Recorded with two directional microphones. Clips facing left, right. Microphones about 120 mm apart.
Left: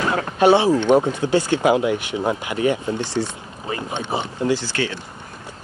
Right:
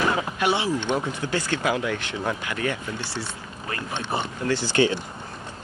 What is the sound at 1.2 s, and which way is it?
Speech, 20° left (ahead or behind).